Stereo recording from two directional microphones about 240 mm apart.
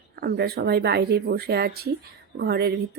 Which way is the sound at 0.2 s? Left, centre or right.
Right.